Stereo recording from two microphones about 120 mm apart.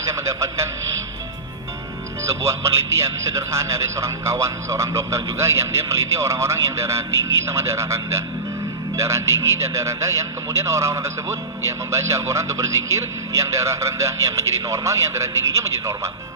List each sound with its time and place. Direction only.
0.0 s a man's voice: 25° right (ahead or behind)
2.2 s a man's voice: 25° right (ahead or behind)